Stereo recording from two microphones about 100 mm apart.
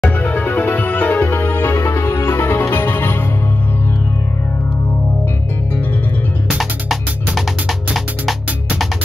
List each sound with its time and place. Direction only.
0.0 s music: 15° left (ahead or behind)
6.6 s music: centre (ahead or behind)